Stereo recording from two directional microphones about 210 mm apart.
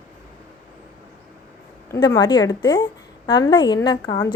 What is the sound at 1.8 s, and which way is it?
A woman's voice, 15° left (ahead or behind).